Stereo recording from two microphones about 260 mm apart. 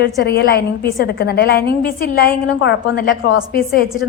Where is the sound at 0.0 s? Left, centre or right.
Left.